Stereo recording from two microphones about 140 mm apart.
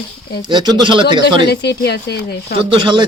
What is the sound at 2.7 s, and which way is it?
Speech, 35° right (ahead or behind).